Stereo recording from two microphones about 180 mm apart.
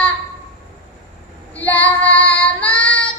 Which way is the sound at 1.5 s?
10° left (ahead or behind).